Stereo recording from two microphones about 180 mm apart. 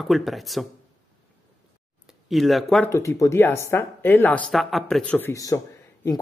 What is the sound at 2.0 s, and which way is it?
Speech, centre (ahead or behind).